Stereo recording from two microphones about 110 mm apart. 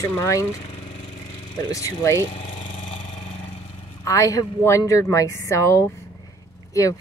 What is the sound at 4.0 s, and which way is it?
A woman's voice, 30° left (ahead or behind).